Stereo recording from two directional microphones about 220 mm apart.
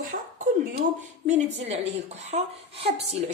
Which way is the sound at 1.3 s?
30° right (ahead or behind).